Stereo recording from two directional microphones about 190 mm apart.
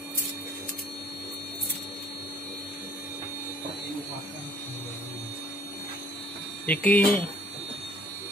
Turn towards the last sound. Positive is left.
turn(degrees=10)  # may be behind; listen again after turning